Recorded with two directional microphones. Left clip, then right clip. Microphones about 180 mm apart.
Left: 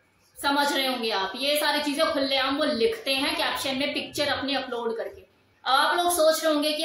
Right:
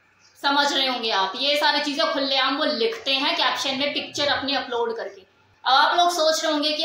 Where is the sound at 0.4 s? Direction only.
15° left (ahead or behind).